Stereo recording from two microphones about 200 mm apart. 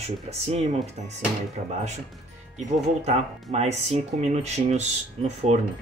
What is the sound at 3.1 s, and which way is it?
Speech, 35° right (ahead or behind).